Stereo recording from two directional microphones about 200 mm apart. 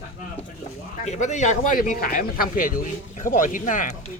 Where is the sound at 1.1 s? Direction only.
35° left (ahead or behind).